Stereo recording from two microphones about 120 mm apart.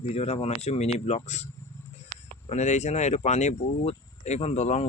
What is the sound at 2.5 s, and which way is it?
Speech, 70° left (ahead or behind).